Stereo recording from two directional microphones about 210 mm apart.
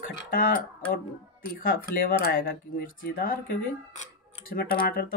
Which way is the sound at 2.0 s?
45° left (ahead or behind).